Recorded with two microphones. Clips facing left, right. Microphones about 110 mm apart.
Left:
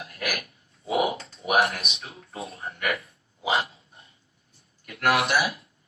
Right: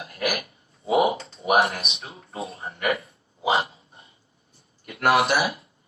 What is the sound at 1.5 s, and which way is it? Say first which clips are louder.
Speech: right 1 dB; 30° right (ahead or behind).